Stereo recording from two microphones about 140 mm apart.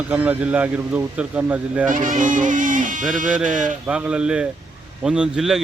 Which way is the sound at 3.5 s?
65° right (ahead or behind).